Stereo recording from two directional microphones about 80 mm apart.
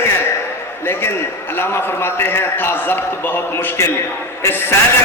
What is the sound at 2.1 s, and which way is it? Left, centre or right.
Speech, left.